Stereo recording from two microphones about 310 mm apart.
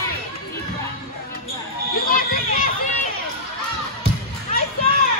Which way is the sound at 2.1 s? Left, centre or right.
Left.